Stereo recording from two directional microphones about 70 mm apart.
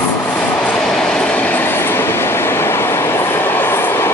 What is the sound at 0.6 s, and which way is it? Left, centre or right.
Train, centre.